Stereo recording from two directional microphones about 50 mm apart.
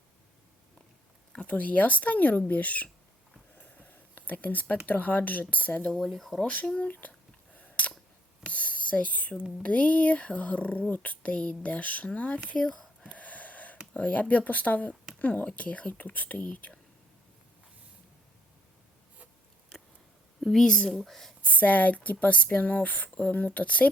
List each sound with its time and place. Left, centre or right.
1.3 s speech: left
3.6 s a sound: left
4.9 s speech: left
6.0 s speech: centre
6.7 s speech: left
7.5 s a sound: left
8.5 s whispering: left
9.6 s speech: left
13.1 s a sound: left
13.9 s speech: left
20.4 s speech: centre
20.9 s speech: centre
21.4 s speech: left